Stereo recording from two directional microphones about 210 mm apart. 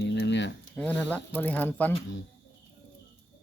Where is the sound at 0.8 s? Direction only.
5° left (ahead or behind).